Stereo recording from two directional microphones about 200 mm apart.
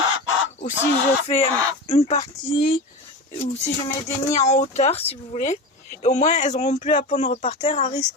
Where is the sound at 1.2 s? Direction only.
30° left (ahead or behind).